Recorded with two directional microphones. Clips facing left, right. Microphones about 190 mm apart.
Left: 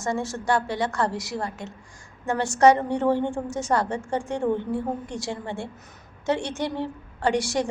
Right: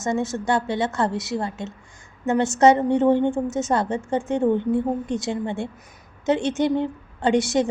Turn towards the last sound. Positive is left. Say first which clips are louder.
# right 4 dB
turn(degrees=-20)  # may be behind; listen again after turning